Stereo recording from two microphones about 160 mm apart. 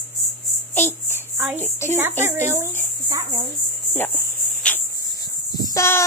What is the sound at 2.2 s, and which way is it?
Speech, 15° right (ahead or behind).